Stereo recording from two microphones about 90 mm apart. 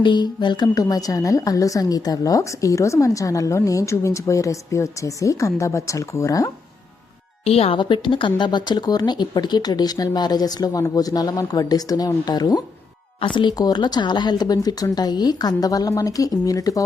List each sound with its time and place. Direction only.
0.0 s a woman's voice: 60° left (ahead or behind); by 6.5 s 40° left (ahead or behind)
7.5 s speech: 80° left; by 12.6 s 45° left (ahead or behind)
13.1 s speech: 65° left (ahead or behind); by 16.8 s 40° left (ahead or behind)